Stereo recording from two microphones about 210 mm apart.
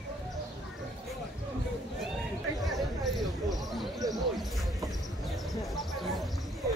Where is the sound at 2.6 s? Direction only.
Centre (ahead or behind).